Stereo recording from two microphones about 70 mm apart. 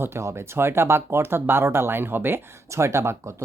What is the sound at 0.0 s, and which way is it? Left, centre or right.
Speech, right.